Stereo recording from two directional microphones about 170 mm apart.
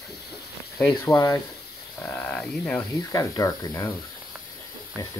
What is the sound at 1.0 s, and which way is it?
Speech, 15° left (ahead or behind).